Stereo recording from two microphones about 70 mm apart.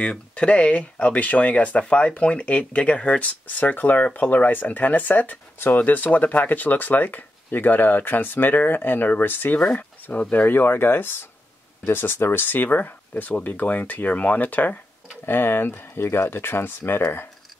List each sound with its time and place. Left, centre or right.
0.0 s speech: centre; by 17.3 s left